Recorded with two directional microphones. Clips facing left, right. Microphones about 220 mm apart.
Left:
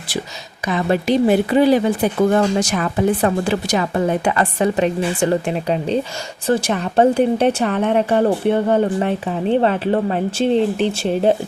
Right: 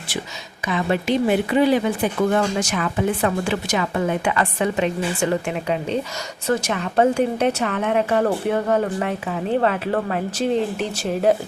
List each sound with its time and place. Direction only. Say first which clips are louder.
0.7 s speech: left 3 dB; 40° left (ahead or behind)